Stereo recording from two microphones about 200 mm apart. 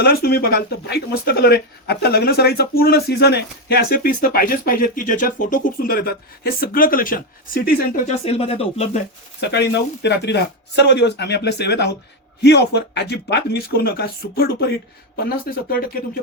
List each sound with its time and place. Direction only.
0.0 s speech: 50° left (ahead or behind)
8.0 s speech: 30° left (ahead or behind)
9.4 s speech: 55° left (ahead or behind)